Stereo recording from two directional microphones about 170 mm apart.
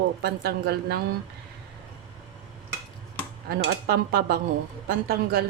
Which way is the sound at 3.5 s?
65° right (ahead or behind).